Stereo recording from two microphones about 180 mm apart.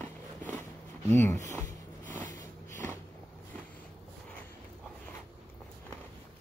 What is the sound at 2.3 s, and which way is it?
Snort, 15° left (ahead or behind).